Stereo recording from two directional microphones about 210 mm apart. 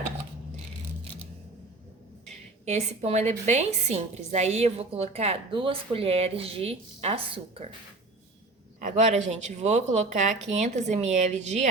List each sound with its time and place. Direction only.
2.6 s a woman's voice: 30° right (ahead or behind)
8.8 s speech: 35° right (ahead or behind)